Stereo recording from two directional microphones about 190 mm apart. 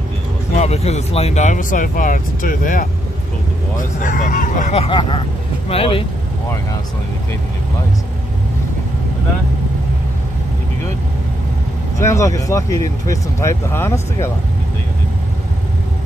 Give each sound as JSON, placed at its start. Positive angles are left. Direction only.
{"t": 0.6, "sound": "speech", "side_deg": 35}
{"t": 12.0, "sound": "speech", "side_deg": 15}